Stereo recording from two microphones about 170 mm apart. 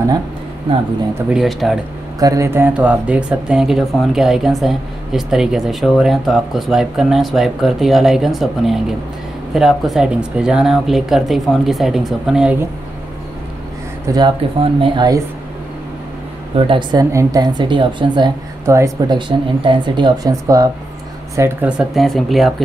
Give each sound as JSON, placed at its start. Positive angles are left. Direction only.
{"t": 1.1, "sound": "speech", "side_deg": -5}
{"t": 2.1, "sound": "speech", "side_deg": -20}
{"t": 14.1, "sound": "speech", "side_deg": -30}
{"t": 16.5, "sound": "speech", "side_deg": -30}
{"t": 17.1, "sound": "speech", "side_deg": -20}